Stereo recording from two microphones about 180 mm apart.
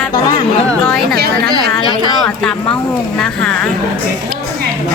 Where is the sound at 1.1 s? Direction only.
60° right (ahead or behind).